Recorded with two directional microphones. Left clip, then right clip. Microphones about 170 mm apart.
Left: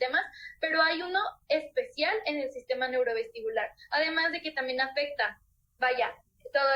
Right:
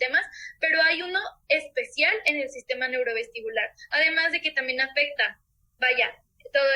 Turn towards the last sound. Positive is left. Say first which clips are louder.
# right 4 dB
turn(degrees=-75)  # may be behind; listen again after turning